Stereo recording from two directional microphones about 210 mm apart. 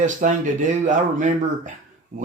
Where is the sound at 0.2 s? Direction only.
35° right (ahead or behind).